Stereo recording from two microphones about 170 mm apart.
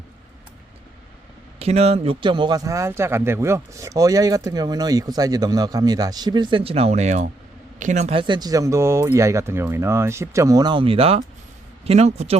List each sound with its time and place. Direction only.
1.5 s speech: 35° right (ahead or behind)
8.2 s a man's voice: 25° right (ahead or behind)